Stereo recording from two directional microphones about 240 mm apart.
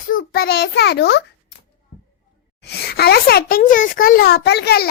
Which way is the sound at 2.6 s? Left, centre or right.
Left.